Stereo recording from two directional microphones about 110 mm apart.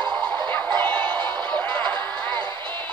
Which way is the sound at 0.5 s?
15° left (ahead or behind).